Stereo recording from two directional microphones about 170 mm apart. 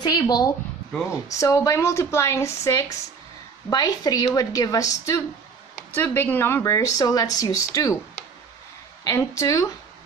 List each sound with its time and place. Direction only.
0.0 s a woman's voice: 25° left (ahead or behind)